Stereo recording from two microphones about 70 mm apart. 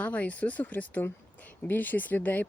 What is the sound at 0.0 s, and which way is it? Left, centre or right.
Speech, left.